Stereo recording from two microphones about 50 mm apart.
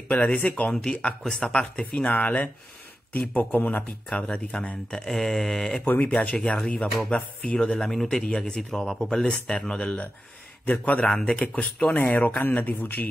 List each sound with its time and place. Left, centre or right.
0.1 s speech: left
2.0 s speech: left
4.1 s speech: left
5.9 s speech: left
6.4 s speech: centre; by 13.1 s left